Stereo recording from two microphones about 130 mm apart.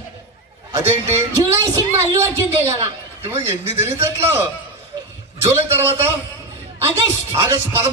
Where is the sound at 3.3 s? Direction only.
20° right (ahead or behind).